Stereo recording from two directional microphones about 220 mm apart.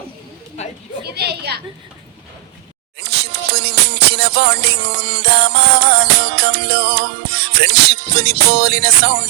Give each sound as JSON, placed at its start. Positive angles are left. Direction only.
{"t": 1.0, "sound": "a woman's voice", "side_deg": -50}
{"t": 3.0, "sound": "music", "side_deg": -50}